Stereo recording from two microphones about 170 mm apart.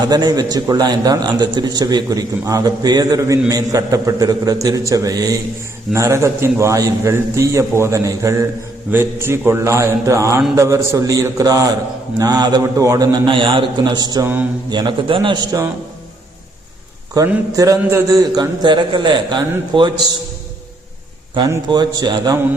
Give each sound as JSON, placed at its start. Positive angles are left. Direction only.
{"t": 0.0, "sound": "a man's voice", "side_deg": -25}
{"t": 17.2, "sound": "a man's voice", "side_deg": -15}
{"t": 21.5, "sound": "a man's voice", "side_deg": -25}